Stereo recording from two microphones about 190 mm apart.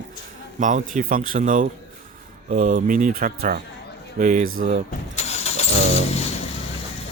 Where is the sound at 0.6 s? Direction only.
40° right (ahead or behind).